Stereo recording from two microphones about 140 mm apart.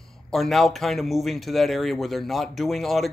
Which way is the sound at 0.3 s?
Centre (ahead or behind).